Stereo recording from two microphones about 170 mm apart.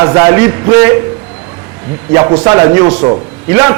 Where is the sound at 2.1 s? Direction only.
20° right (ahead or behind).